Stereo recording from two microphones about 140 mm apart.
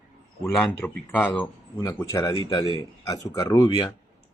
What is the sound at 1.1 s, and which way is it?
Speech, 10° left (ahead or behind).